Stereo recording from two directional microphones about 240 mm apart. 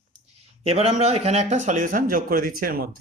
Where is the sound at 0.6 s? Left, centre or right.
Right.